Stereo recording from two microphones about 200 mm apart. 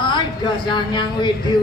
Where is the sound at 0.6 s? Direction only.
25° left (ahead or behind).